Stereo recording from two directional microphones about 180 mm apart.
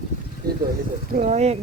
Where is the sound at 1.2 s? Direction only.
35° right (ahead or behind).